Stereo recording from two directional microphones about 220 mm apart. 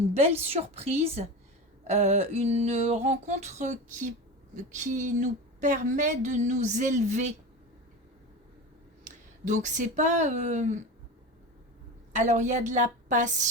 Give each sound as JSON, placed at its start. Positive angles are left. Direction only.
{"t": 0.3, "sound": "a sound", "side_deg": -30}
{"t": 4.5, "sound": "a woman's voice", "side_deg": -35}
{"t": 9.0, "sound": "speech", "side_deg": -35}
{"t": 12.1, "sound": "a woman's voice", "side_deg": -35}